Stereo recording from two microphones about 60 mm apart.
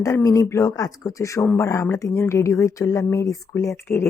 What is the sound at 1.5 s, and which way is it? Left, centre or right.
Speech, left.